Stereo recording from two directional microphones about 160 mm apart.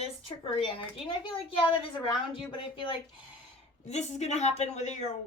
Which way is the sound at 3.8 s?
45° left (ahead or behind).